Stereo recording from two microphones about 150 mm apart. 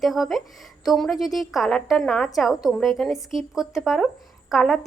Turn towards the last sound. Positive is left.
turn(degrees=0)  # may be behind; listen again after turning